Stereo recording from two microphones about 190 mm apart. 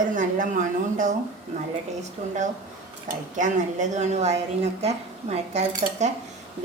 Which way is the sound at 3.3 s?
40° right (ahead or behind).